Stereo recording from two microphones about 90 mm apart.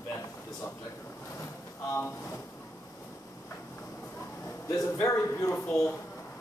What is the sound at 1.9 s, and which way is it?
Speech, 30° left (ahead or behind).